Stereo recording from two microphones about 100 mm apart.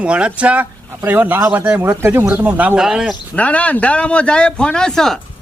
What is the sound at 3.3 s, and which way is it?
A man's voice, 15° left (ahead or behind).